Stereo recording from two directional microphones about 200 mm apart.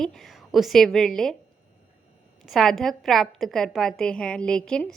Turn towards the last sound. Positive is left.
turn(degrees=5)  # may be behind; listen again after turning